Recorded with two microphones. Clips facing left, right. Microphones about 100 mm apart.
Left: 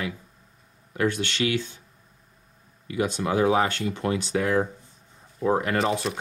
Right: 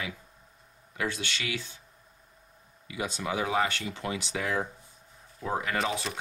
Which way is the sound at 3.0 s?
50° left (ahead or behind).